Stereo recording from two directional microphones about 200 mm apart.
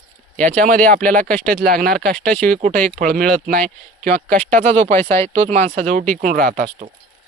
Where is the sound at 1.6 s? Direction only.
50° right (ahead or behind).